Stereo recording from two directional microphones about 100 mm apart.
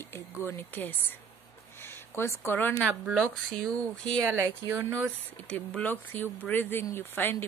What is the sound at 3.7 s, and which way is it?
Speech, 10° left (ahead or behind).